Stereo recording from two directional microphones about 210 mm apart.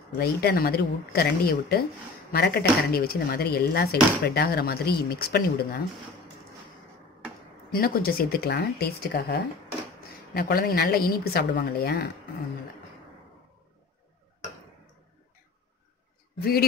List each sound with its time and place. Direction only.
0.2 s speech: 50° left (ahead or behind)
7.7 s speech: 45° left (ahead or behind)
16.3 s speech: 45° left (ahead or behind)